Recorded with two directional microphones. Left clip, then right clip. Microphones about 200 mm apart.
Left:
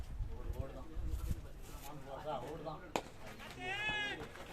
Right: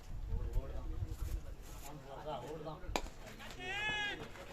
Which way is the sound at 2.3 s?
55° left (ahead or behind).